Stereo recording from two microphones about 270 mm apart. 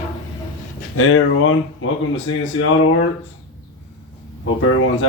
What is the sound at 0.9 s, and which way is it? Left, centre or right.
Speech, left.